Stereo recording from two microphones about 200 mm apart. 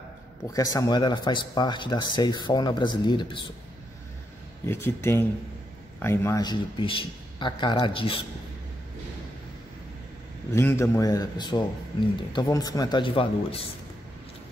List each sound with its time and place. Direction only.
0.5 s speech: 15° left (ahead or behind)
4.6 s speech: 10° left (ahead or behind); by 8.3 s 25° left (ahead or behind)
10.5 s speech: 10° left (ahead or behind); by 13.7 s 30° left (ahead or behind)